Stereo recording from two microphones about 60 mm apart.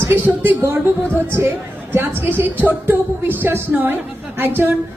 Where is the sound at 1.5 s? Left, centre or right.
Right.